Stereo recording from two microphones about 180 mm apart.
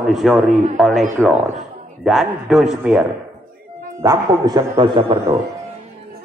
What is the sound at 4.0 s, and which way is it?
A man's voice, 20° right (ahead or behind).